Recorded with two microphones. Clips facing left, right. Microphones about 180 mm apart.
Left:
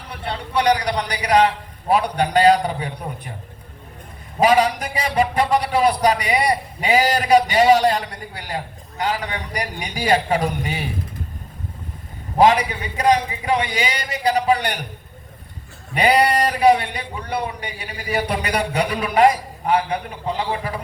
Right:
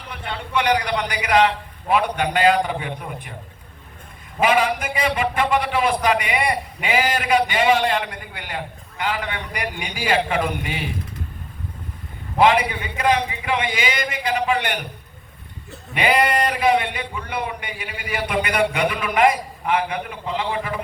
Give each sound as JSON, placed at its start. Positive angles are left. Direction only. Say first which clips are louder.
{"t": 0.1, "sound": "a man's voice", "louder": "left 1 dB", "side_deg": 35}
{"t": 4.4, "sound": "a man's voice", "louder": "left 3 dB", "side_deg": 40}
{"t": 12.4, "sound": "a man's voice", "louder": "left 2 dB", "side_deg": 40}
{"t": 16.0, "sound": "a man's voice", "louder": "left 2 dB", "side_deg": 40}